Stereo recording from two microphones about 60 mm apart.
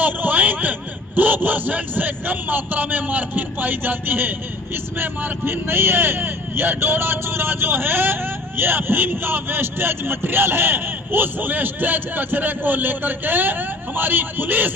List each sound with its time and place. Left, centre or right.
0.0 s a man's voice: right